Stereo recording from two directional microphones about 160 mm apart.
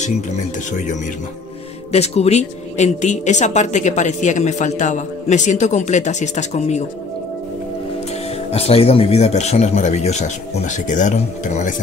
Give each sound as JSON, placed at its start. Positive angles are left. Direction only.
{"t": 1.9, "sound": "a woman's voice", "side_deg": 40}
{"t": 8.5, "sound": "a woman's voice", "side_deg": 40}